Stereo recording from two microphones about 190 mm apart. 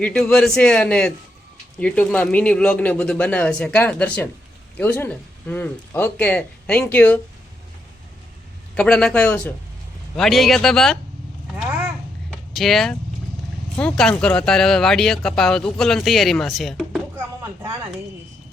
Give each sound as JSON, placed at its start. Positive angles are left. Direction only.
{"t": 0.0, "sound": "speech", "side_deg": 5}
{"t": 8.7, "sound": "speech", "side_deg": 5}
{"t": 12.3, "sound": "a sound", "side_deg": 0}
{"t": 13.7, "sound": "speech", "side_deg": 5}
{"t": 17.4, "sound": "speech", "side_deg": -15}